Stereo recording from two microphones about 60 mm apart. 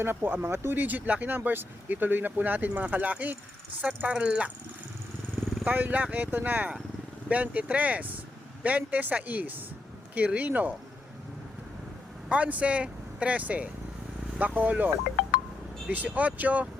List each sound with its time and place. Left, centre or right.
0.0 s speech: right
5.6 s speech: right
12.3 s speech: right